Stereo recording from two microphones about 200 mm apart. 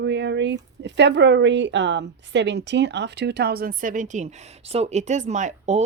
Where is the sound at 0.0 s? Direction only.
60° right (ahead or behind).